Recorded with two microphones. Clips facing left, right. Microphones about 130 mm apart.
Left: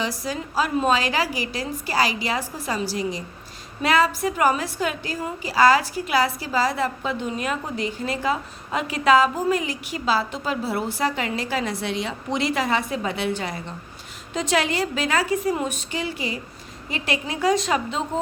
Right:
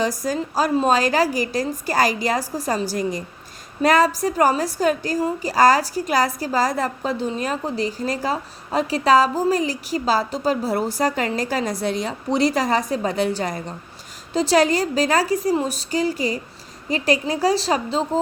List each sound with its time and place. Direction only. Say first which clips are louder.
0.0 s a woman's voice: right 5 dB; 45° right (ahead or behind)